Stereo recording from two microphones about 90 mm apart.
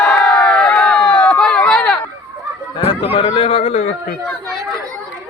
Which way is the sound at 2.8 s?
85° left.